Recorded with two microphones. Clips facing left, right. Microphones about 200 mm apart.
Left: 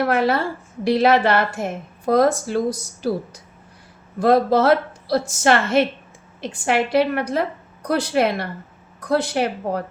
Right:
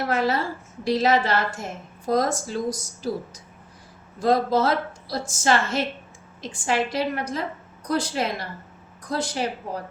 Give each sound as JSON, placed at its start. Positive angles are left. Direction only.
{"t": 0.0, "sound": "a woman's voice", "side_deg": 60}